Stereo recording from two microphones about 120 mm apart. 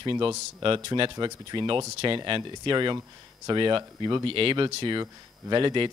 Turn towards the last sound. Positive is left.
turn(degrees=-40)  # may be behind; listen again after turning